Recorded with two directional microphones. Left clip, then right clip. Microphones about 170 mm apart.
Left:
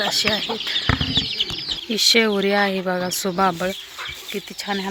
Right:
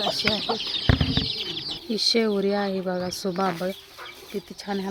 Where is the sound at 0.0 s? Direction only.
Centre (ahead or behind).